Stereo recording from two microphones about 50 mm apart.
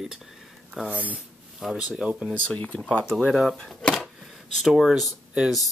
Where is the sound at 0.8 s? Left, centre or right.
Right.